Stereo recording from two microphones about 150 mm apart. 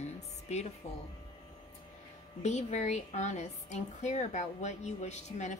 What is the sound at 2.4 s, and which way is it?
A woman's voice, 50° left (ahead or behind).